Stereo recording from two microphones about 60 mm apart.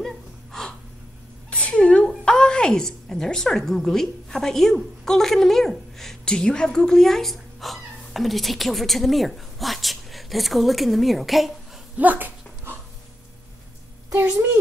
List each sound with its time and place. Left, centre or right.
0.0 s gasp: centre
1.5 s a woman's voice: centre
12.0 s speech: right